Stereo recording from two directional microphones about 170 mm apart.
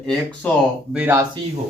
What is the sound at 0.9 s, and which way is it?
Speech, 10° right (ahead or behind).